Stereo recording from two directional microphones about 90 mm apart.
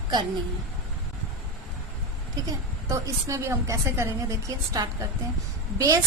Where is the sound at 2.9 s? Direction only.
35° right (ahead or behind).